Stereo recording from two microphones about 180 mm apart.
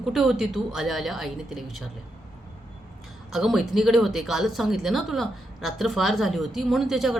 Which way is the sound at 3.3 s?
Centre (ahead or behind).